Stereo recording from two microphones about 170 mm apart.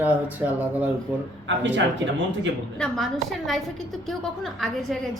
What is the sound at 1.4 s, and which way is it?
Speech, 90° right.